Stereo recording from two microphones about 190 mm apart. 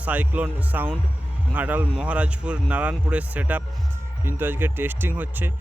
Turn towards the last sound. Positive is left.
turn(degrees=-10)  # may be behind; listen again after turning